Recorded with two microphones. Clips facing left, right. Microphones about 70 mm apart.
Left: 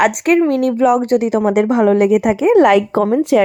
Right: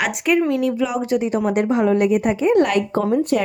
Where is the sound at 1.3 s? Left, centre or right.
Left.